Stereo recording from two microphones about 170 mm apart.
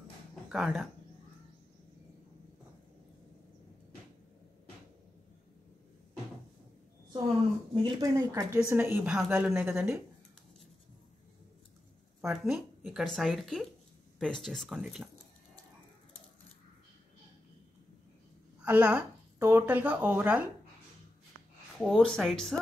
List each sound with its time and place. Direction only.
0.5 s speech: 5° right (ahead or behind)
7.7 s a woman's voice: 25° right (ahead or behind)
12.3 s speech: 5° right (ahead or behind)
18.6 s speech: 10° right (ahead or behind)
21.7 s speech: centre (ahead or behind)